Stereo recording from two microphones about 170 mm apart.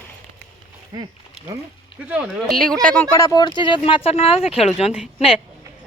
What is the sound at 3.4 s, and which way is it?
Speech, 25° left (ahead or behind).